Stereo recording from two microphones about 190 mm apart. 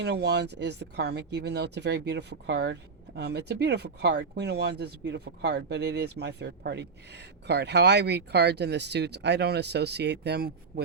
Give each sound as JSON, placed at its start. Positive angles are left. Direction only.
{"t": 0.0, "sound": "speech", "side_deg": -60}